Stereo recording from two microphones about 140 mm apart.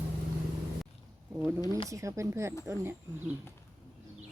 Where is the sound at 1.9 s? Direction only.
20° right (ahead or behind).